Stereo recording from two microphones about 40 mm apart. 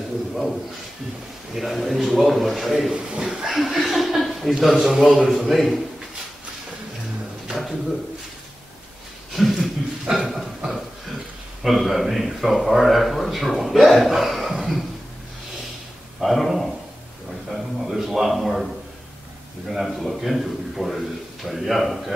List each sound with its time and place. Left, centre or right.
0.3 s a man's voice: centre
2.9 s speech: right
3.3 s a man's voice: centre
9.3 s a sound: centre
10.1 s a man's voice: centre
16.2 s a man's voice: centre
19.7 s a man's voice: centre